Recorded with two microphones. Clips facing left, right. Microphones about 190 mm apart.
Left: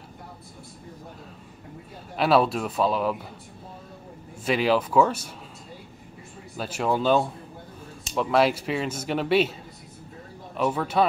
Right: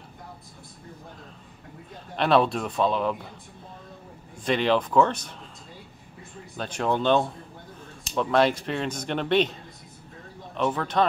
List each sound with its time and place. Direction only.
2.1 s speech: 5° left (ahead or behind)
4.5 s speech: 5° left (ahead or behind)
6.5 s speech: 5° left (ahead or behind)
10.5 s speech: 5° left (ahead or behind)